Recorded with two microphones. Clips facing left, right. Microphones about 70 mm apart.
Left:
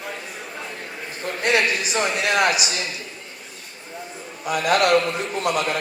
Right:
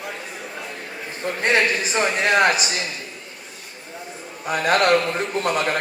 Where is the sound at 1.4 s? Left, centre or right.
Right.